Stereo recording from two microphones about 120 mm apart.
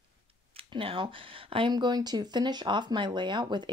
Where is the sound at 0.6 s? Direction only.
50° right (ahead or behind).